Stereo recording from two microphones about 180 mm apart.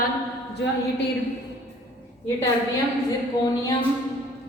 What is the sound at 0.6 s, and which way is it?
Speech, 75° left (ahead or behind).